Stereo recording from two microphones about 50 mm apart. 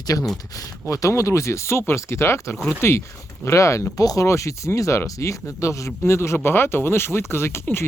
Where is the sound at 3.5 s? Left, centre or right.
Left.